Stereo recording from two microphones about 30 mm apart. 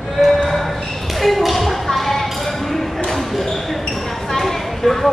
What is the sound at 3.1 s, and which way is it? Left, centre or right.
Basketball bounce, centre.